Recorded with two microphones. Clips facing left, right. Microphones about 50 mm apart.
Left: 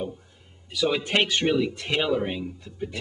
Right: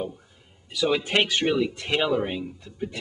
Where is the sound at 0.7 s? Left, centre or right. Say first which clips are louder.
Right 1 dB; centre.